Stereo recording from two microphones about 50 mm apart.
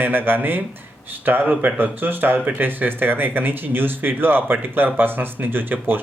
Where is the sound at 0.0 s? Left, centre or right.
Right.